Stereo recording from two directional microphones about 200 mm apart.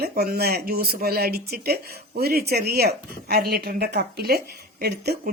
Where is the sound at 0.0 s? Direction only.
50° right (ahead or behind).